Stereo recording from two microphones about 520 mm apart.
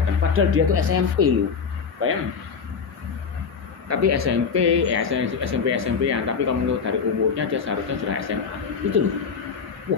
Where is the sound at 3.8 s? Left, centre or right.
Right.